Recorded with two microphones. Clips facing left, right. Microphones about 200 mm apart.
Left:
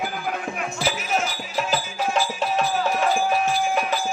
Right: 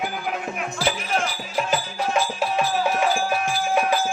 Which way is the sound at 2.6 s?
Centre (ahead or behind).